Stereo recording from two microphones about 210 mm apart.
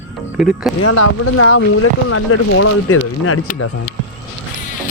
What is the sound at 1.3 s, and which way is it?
Speech, 90° left.